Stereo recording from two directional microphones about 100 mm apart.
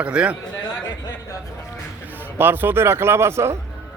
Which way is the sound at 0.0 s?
10° right (ahead or behind).